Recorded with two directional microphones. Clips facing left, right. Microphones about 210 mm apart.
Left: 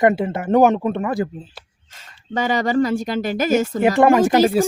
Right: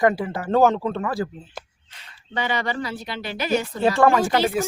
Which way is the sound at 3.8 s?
20° left (ahead or behind).